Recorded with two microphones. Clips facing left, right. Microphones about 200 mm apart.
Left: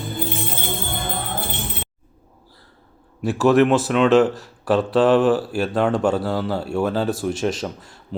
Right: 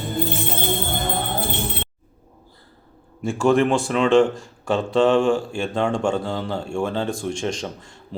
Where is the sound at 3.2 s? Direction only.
5° left (ahead or behind).